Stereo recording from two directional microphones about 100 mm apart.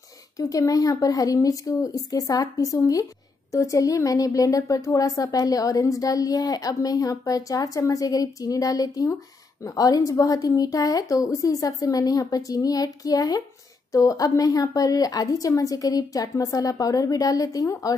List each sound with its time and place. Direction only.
0.4 s a woman's voice: 35° left (ahead or behind)